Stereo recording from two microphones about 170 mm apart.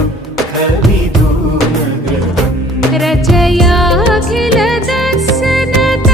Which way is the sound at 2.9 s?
Centre (ahead or behind).